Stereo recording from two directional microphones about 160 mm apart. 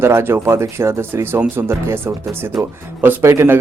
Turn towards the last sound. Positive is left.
turn(degrees=-15)  # may be behind; listen again after turning